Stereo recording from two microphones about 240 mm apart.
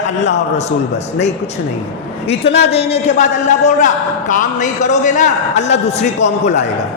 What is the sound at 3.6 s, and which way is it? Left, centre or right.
A man's voice, left.